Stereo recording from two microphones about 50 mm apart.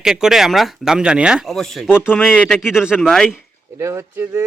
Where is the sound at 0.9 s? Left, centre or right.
Centre.